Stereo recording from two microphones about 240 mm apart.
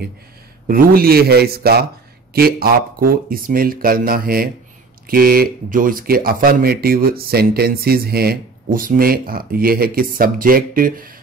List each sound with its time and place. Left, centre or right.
0.7 s speech: right